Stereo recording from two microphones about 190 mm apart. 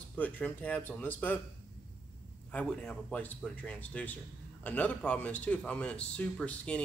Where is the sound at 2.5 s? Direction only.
5° left (ahead or behind).